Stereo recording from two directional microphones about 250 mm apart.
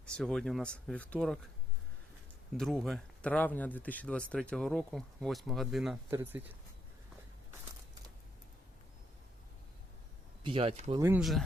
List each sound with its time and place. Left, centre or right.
0.0 s speech: centre
2.6 s speech: centre
10.4 s speech: right
11.0 s speech: centre